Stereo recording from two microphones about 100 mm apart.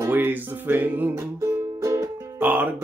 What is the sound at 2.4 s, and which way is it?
Music, 20° right (ahead or behind).